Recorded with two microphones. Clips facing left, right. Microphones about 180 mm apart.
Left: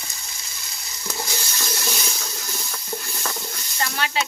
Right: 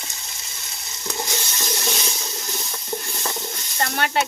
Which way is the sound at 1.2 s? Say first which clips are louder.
Right 2 dB; 20° right (ahead or behind).